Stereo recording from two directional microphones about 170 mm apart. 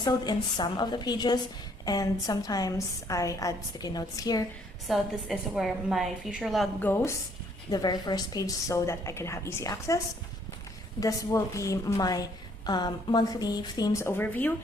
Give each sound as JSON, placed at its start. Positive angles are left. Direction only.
{"t": 0.0, "sound": "a woman's voice", "side_deg": 25}
{"t": 4.9, "sound": "a woman's voice", "side_deg": 0}
{"t": 6.7, "sound": "a woman's voice", "side_deg": 10}
{"t": 11.0, "sound": "a woman's voice", "side_deg": 20}